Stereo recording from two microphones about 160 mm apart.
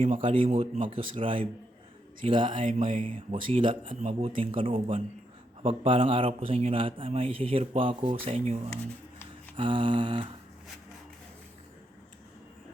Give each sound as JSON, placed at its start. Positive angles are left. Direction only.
{"t": 0.0, "sound": "a man's voice", "side_deg": -35}